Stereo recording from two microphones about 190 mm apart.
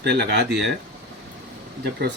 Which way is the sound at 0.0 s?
60° right (ahead or behind).